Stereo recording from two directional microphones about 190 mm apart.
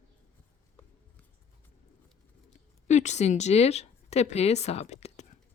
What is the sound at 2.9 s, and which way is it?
A woman's voice, 40° left (ahead or behind).